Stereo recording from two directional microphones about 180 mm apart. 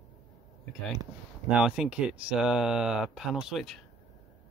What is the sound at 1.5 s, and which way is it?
Speech, 5° right (ahead or behind).